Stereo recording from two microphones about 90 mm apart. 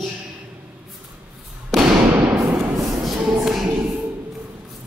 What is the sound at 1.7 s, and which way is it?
Fireworks, 5° left (ahead or behind).